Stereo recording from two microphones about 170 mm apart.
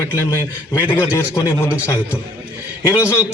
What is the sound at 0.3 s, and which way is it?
A man's voice, 15° left (ahead or behind).